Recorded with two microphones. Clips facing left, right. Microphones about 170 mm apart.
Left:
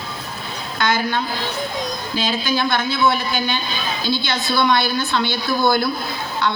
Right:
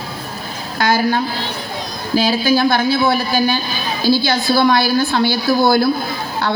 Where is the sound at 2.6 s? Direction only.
40° right (ahead or behind).